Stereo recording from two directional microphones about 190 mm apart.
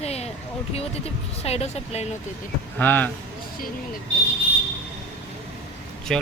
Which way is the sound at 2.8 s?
10° left (ahead or behind).